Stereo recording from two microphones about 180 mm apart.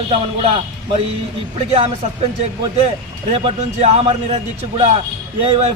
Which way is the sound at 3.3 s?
30° right (ahead or behind).